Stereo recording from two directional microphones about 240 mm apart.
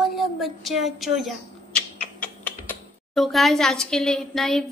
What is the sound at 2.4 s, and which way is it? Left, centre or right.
Speech, centre.